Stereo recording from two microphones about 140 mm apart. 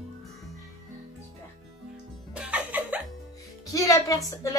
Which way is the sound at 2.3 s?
10° right (ahead or behind).